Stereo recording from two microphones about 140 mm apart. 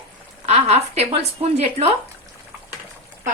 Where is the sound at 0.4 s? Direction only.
50° right (ahead or behind).